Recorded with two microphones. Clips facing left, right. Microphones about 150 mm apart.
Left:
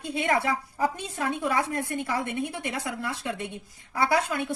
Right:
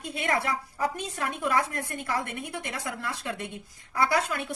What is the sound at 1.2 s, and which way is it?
A woman's voice, 20° left (ahead or behind).